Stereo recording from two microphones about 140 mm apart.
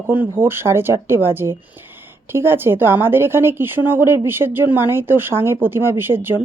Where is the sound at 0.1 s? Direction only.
15° right (ahead or behind).